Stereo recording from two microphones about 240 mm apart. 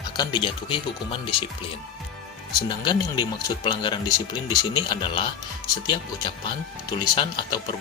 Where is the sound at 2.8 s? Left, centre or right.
Centre.